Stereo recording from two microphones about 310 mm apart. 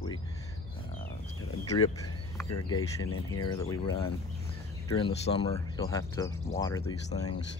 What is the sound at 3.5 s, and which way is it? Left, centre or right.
Speech, centre.